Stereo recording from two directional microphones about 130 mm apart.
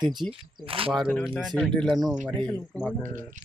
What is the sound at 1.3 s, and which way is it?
Speech, centre (ahead or behind).